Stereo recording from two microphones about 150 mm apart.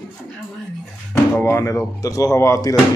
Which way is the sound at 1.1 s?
15° left (ahead or behind).